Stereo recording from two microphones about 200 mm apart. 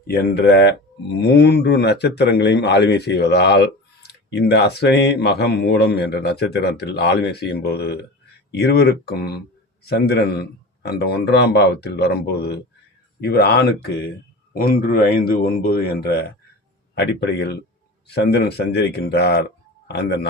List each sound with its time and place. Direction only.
0.3 s speech: 55° left (ahead or behind)